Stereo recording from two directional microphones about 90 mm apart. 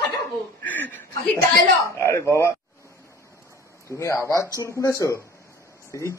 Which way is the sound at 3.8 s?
30° left (ahead or behind).